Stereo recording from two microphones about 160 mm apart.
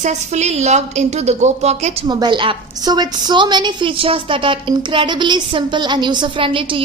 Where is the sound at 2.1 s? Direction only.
30° right (ahead or behind).